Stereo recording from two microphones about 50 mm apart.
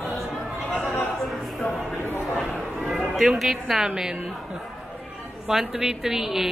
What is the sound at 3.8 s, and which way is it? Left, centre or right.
Speech, centre.